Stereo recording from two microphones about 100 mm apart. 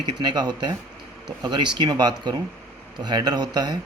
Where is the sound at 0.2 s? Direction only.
45° right (ahead or behind).